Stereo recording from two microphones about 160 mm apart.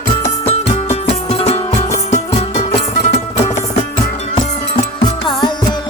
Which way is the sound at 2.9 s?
65° left (ahead or behind).